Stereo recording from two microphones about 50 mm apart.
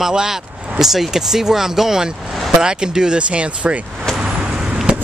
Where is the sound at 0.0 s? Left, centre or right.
Centre.